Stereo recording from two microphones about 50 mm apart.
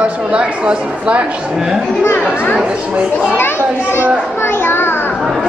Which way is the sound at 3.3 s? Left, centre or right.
Left.